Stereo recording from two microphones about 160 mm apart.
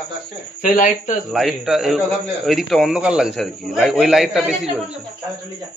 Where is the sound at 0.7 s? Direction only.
55° left (ahead or behind).